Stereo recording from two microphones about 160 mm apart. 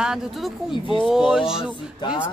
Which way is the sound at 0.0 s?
5° right (ahead or behind).